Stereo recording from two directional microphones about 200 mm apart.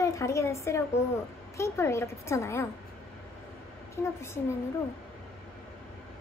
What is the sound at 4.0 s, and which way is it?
Speech, 10° left (ahead or behind).